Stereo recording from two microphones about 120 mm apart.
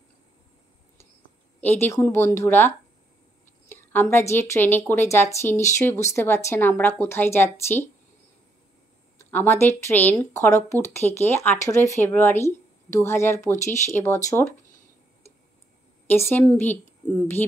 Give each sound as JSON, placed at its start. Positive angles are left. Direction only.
{"t": 1.8, "sound": "a woman's voice", "side_deg": 20}
{"t": 9.2, "sound": "a woman's voice", "side_deg": 15}
{"t": 16.1, "sound": "a woman's voice", "side_deg": 20}